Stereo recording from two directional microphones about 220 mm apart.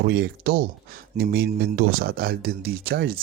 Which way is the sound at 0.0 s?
45° right (ahead or behind).